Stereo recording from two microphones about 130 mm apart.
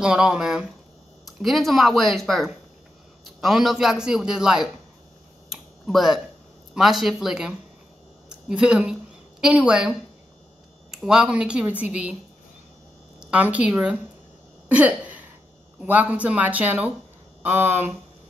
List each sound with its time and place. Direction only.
0.0 s speech: 5° right (ahead or behind)
5.5 s a sound: centre (ahead or behind)
6.7 s speech: 5° right (ahead or behind)
13.2 s speech: 10° right (ahead or behind)
14.7 s a sound: 10° right (ahead or behind)
15.8 s speech: 10° right (ahead or behind)